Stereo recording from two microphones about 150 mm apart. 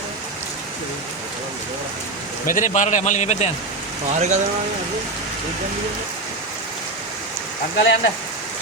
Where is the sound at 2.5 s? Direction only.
60° left (ahead or behind).